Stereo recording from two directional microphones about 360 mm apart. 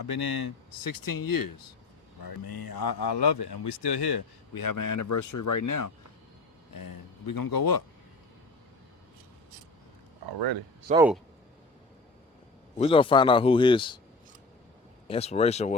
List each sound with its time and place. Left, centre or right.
0.0 s speech: left
6.7 s speech: left
10.2 s speech: right
10.9 s speech: centre
12.8 s a man's voice: centre
15.0 s a man's voice: centre